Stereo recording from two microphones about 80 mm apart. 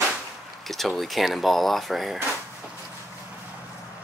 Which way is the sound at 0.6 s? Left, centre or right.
Centre.